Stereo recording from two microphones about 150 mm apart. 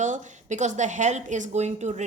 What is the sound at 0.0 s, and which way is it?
Speech, 55° right (ahead or behind).